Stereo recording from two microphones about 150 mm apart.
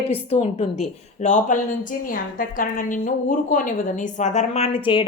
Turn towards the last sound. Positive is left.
turn(degrees=35)  # may be behind; listen again after turning